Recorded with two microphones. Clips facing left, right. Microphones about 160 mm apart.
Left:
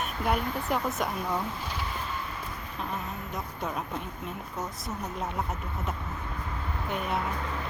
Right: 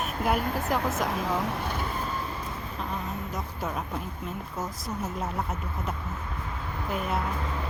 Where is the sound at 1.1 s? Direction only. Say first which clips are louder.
Right 3 dB; 90° right; by 1.7 s 70° right (ahead or behind).